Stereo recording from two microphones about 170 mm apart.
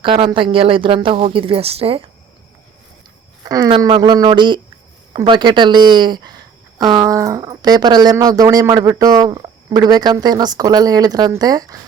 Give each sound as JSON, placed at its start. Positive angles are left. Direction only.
{"t": 0.0, "sound": "speech", "side_deg": -30}
{"t": 3.4, "sound": "speech", "side_deg": -25}